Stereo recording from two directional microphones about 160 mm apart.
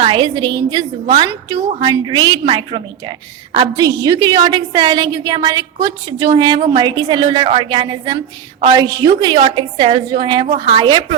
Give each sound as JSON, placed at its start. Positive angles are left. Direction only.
{"t": 0.0, "sound": "a woman's voice", "side_deg": -30}